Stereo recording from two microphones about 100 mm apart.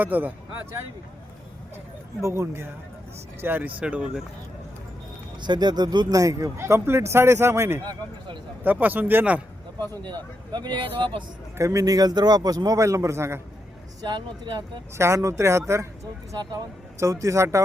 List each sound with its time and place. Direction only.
0.0 s speech: 15° right (ahead or behind)
2.2 s speech: 25° right (ahead or behind); by 4.2 s 10° right (ahead or behind)
5.4 s speech: 45° right (ahead or behind); by 9.4 s 15° right (ahead or behind)
10.0 s speech: 50° right (ahead or behind)
11.5 s a man's voice: 30° right (ahead or behind)
14.0 s speech: 50° right (ahead or behind)
14.9 s speech: 30° right (ahead or behind)
16.3 s speech: 40° right (ahead or behind)
17.0 s a man's voice: 30° right (ahead or behind)